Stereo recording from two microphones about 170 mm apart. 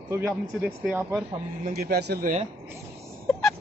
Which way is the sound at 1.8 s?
65° right (ahead or behind).